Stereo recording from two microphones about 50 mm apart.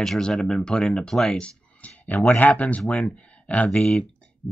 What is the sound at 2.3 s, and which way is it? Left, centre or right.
Speech, left.